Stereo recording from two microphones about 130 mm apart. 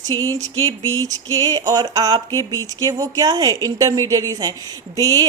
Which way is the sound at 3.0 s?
30° right (ahead or behind).